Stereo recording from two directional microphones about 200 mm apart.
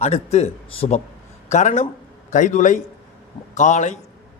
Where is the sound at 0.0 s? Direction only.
35° left (ahead or behind).